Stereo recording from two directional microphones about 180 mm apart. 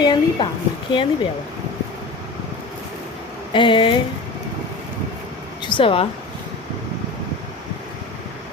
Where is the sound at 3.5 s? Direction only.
25° left (ahead or behind).